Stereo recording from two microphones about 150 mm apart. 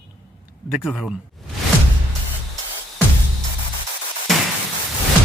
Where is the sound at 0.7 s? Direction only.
5° right (ahead or behind).